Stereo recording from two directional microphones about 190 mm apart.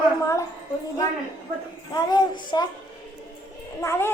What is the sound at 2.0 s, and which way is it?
Music, 20° left (ahead or behind).